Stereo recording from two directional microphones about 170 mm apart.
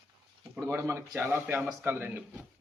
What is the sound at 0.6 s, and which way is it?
A man's voice, 15° right (ahead or behind).